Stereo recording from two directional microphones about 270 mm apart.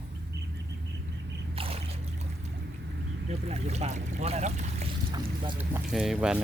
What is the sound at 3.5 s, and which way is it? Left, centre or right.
Speech, right.